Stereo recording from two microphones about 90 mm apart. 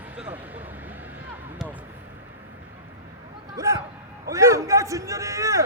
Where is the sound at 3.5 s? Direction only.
35° right (ahead or behind).